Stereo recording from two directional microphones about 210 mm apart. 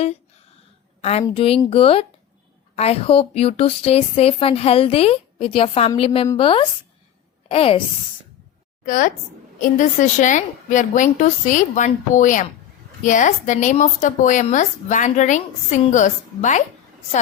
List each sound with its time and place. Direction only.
1.2 s a woman's voice: 25° left (ahead or behind)
8.8 s a woman's voice: 40° left (ahead or behind)